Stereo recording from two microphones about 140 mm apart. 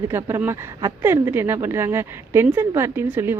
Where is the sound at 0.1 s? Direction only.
15° right (ahead or behind).